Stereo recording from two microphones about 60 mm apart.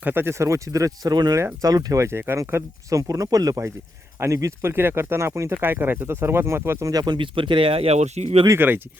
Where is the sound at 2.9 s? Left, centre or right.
Right.